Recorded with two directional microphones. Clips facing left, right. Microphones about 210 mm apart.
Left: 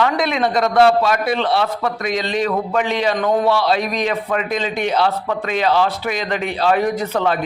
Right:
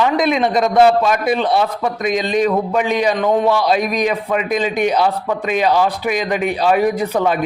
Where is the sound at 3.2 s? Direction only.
Centre (ahead or behind).